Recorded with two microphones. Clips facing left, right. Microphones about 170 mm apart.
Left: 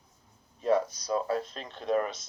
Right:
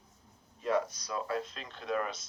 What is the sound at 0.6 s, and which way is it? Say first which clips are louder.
A man's voice: left 5 dB; 30° left (ahead or behind).